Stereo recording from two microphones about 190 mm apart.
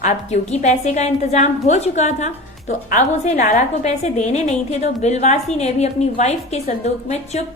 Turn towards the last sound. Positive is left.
turn(degrees=35)  # may be behind; listen again after turning